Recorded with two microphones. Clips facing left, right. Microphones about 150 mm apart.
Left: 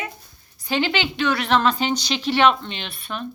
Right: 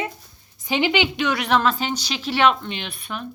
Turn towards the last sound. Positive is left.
turn(degrees=-10)  # may be behind; listen again after turning